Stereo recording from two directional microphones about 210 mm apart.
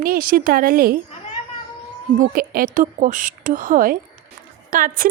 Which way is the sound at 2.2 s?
40° right (ahead or behind).